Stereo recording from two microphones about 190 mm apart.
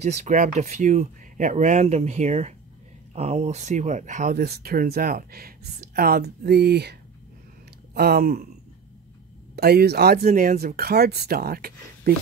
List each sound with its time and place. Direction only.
0.0 s speech: 40° right (ahead or behind)
9.6 s speech: 55° right (ahead or behind)